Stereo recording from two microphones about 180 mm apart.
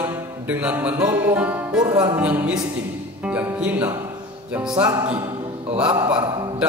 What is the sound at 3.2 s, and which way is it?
Speech, 10° right (ahead or behind).